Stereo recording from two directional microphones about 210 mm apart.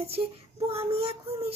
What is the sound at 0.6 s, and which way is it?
Female singing, 30° right (ahead or behind).